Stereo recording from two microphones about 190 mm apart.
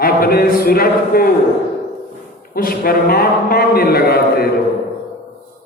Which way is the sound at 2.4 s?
50° left (ahead or behind).